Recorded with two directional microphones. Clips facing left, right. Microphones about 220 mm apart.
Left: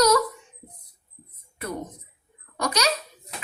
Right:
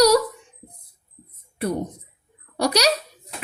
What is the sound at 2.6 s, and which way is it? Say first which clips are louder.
Speech: right 5 dB; 35° right (ahead or behind).